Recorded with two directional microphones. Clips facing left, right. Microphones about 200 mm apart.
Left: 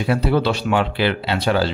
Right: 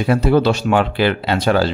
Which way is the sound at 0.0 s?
45° right (ahead or behind).